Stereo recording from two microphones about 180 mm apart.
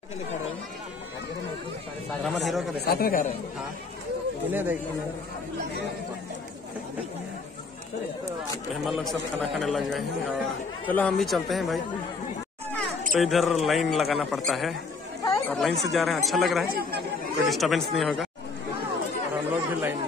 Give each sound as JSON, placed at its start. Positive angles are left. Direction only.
{"t": 2.2, "sound": "speech", "side_deg": 0}
{"t": 2.8, "sound": "speech", "side_deg": 55}
{"t": 4.5, "sound": "speech", "side_deg": -10}
{"t": 8.8, "sound": "speech", "side_deg": 0}
{"t": 13.1, "sound": "speech", "side_deg": 0}
{"t": 19.5, "sound": "speech", "side_deg": -10}